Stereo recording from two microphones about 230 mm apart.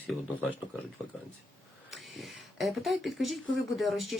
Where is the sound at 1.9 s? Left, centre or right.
Centre.